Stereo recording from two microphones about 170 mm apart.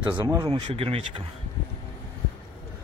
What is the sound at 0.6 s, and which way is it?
Speech, 35° right (ahead or behind).